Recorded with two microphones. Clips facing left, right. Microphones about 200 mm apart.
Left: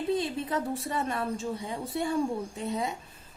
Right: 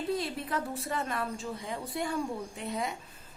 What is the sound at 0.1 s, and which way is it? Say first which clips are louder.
A woman's voice: left 5 dB; 25° left (ahead or behind).